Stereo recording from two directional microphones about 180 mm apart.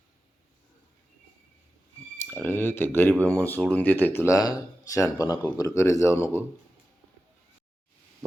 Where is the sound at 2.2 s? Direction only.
10° left (ahead or behind).